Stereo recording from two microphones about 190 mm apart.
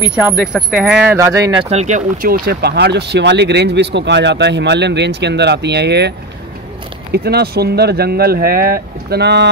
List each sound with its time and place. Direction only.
0.1 s speech: 5° right (ahead or behind); by 6.1 s 60° right (ahead or behind)
7.2 s speech: 55° right (ahead or behind)